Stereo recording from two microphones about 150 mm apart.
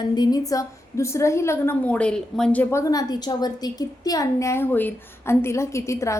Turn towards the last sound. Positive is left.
turn(degrees=20)  # may be behind; listen again after turning